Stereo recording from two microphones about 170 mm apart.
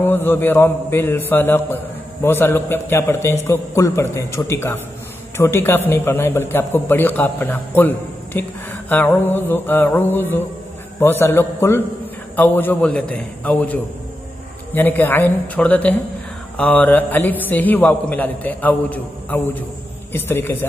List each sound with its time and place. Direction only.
0.0 s a man's voice: 10° left (ahead or behind)